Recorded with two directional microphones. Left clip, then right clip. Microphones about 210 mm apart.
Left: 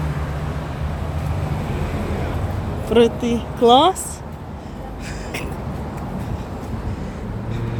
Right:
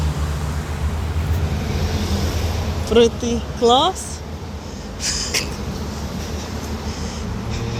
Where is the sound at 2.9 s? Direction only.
20° left (ahead or behind).